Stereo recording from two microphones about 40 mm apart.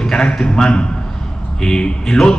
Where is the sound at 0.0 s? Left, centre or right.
Centre.